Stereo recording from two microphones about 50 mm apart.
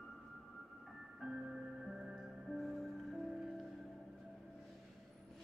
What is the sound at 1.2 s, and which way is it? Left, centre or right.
Music, centre.